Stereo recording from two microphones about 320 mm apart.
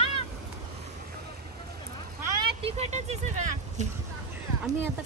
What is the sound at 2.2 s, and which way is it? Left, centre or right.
Vehicle, centre.